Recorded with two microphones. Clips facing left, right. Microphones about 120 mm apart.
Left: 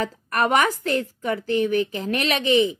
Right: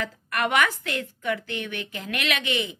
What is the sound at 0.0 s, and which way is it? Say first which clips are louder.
Speech: left 5 dB; 35° left (ahead or behind).